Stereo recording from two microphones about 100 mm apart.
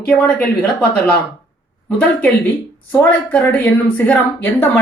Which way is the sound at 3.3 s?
15° left (ahead or behind).